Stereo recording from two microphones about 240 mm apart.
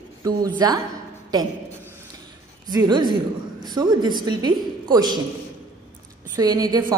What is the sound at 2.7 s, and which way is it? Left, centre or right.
Speech, centre.